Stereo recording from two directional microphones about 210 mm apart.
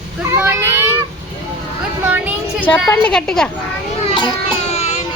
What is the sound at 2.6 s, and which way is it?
Speech, 5° left (ahead or behind).